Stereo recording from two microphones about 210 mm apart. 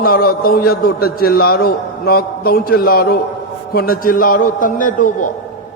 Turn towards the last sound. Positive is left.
turn(degrees=40)  # may be behind; listen again after turning